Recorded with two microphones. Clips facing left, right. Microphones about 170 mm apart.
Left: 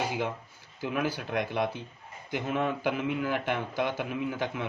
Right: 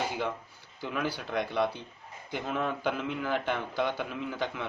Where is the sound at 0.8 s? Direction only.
15° left (ahead or behind).